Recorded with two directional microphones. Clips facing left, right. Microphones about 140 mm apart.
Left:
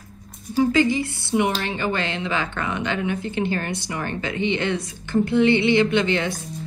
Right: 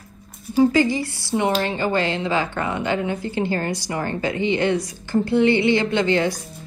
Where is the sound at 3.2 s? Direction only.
20° left (ahead or behind).